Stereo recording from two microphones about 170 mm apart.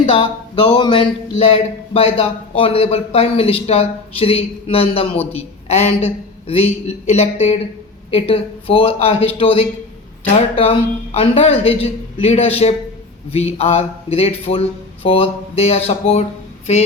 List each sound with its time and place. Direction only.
0.0 s a woman's voice: 30° left (ahead or behind)